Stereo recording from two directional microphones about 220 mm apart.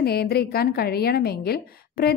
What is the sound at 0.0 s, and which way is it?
Speech, 45° left (ahead or behind).